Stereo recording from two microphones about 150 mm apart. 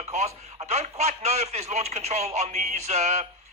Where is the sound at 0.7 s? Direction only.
45° right (ahead or behind).